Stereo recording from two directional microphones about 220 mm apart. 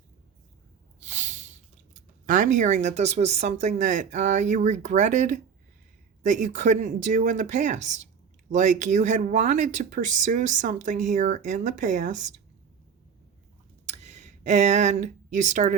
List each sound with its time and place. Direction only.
1.1 s snort: 35° right (ahead or behind)
2.3 s speech: 35° right (ahead or behind)
14.0 s speech: 30° right (ahead or behind)